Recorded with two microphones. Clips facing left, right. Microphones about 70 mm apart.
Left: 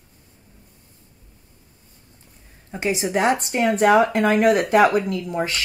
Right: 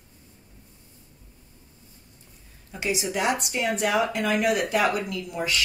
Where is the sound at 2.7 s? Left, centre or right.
Left.